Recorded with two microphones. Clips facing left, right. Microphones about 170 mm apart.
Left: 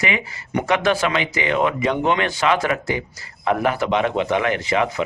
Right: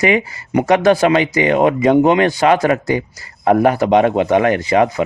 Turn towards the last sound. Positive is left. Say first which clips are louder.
# right 6 dB
turn(degrees=-40)  # may be behind; listen again after turning